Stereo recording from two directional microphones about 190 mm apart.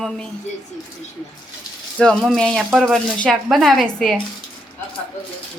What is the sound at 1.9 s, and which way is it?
Speech, 5° left (ahead or behind).